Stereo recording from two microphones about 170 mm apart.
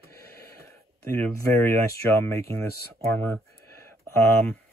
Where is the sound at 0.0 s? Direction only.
15° left (ahead or behind).